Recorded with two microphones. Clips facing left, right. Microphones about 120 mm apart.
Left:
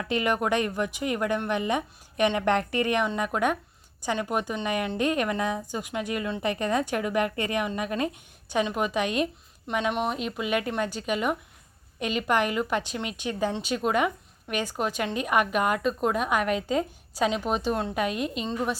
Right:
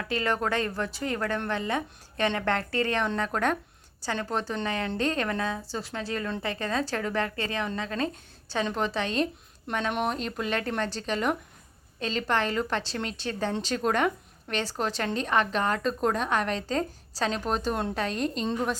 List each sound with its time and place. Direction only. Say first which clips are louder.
0.0 s a woman's voice: left 2 dB; 20° left (ahead or behind); by 18.8 s 5° left (ahead or behind)